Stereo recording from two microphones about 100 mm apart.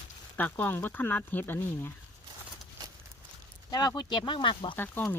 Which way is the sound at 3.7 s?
45° left (ahead or behind).